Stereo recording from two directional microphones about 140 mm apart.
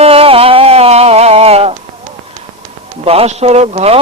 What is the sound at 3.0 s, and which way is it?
Speech, 45° right (ahead or behind).